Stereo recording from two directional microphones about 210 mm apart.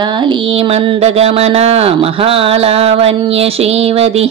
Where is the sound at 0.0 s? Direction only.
20° right (ahead or behind).